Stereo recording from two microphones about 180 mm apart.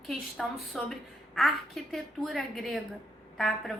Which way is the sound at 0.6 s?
Centre (ahead or behind).